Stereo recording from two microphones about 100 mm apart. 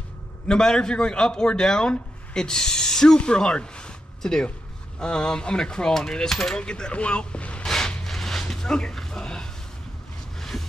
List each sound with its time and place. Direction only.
0.5 s speech: 5° left (ahead or behind)